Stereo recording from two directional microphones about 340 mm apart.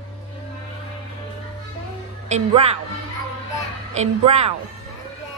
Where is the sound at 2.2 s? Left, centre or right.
Centre.